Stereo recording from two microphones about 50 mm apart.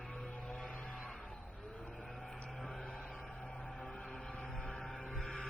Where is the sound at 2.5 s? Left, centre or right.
Centre.